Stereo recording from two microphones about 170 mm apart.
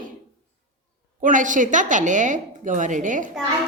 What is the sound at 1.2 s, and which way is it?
A woman's voice, 50° right (ahead or behind).